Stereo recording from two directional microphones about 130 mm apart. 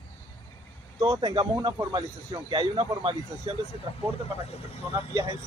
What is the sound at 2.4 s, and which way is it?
Speech, 40° right (ahead or behind).